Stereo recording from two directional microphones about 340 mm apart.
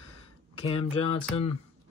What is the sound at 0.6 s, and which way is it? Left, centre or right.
Speech, centre.